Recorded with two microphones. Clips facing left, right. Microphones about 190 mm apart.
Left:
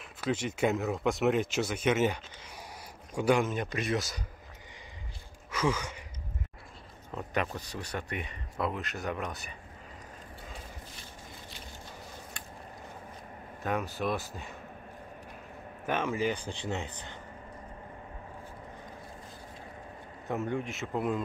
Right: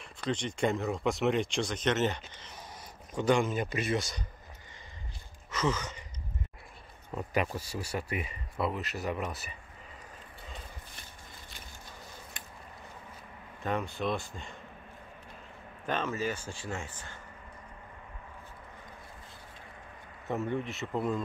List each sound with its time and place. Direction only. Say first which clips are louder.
0.0 s speech: left 2 dB; 5° left (ahead or behind)
5.5 s sigh: left 1 dB; 10° left (ahead or behind)
7.1 s speech: right 1 dB; 5° right (ahead or behind)
13.6 s speech: even; 5° left (ahead or behind)
15.8 s speech: left 2 dB; 10° left (ahead or behind)
20.2 s speech: even; centre (ahead or behind)